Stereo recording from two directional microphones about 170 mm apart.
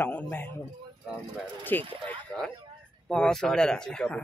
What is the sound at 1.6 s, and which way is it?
Speech, 10° left (ahead or behind).